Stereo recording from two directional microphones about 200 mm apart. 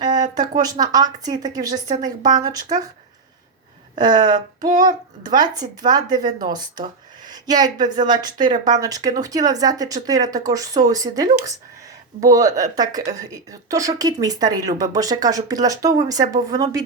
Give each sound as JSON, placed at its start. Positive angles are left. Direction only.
{"t": 0.0, "sound": "speech", "side_deg": -20}
{"t": 3.9, "sound": "speech", "side_deg": -20}